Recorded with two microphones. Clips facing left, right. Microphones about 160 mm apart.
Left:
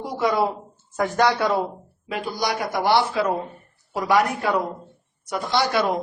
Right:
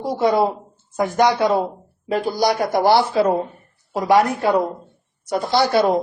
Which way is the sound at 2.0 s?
40° right (ahead or behind).